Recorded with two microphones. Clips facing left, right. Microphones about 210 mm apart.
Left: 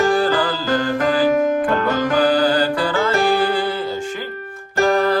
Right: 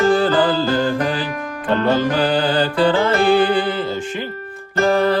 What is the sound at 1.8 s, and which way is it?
Music, 30° right (ahead or behind).